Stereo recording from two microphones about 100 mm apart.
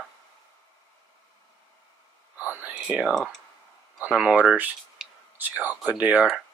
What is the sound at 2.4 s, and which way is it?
Whispering, 15° right (ahead or behind).